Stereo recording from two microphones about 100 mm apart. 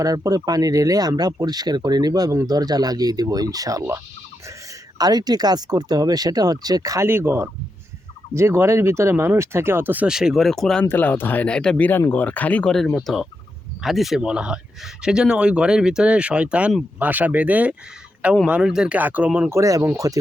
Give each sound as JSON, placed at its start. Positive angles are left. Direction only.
{"t": 0.0, "sound": "speech", "side_deg": -35}
{"t": 4.9, "sound": "speech", "side_deg": -40}
{"t": 7.1, "sound": "speech", "side_deg": -25}
{"t": 10.1, "sound": "speech", "side_deg": -5}
{"t": 10.8, "sound": "speech", "side_deg": 20}
{"t": 11.9, "sound": "speech", "side_deg": 20}
{"t": 12.7, "sound": "speech", "side_deg": 5}
{"t": 19.5, "sound": "speech", "side_deg": -30}